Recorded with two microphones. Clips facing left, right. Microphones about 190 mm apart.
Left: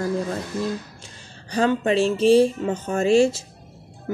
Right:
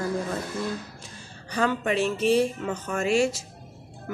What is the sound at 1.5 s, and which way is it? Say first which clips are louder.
Speech: left 5 dB; 30° left (ahead or behind).